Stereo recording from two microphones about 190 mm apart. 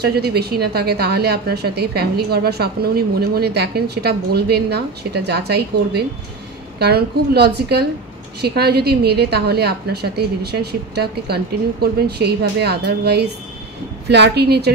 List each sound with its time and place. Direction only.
0.0 s a woman's voice: 55° right (ahead or behind)